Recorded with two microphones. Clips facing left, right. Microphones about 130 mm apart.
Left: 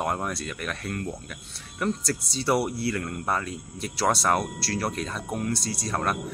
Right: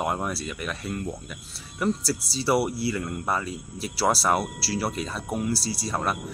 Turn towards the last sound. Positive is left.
turn(degrees=-5)  # may be behind; listen again after turning